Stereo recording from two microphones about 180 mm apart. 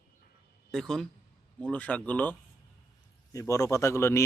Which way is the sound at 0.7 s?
Centre (ahead or behind).